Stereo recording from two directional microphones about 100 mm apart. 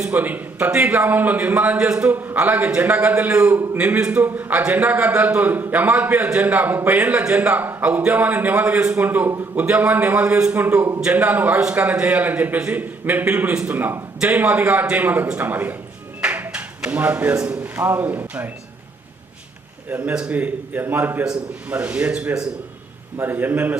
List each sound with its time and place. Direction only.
0.0 s a man's voice: 15° right (ahead or behind)
19.9 s a man's voice: 15° right (ahead or behind)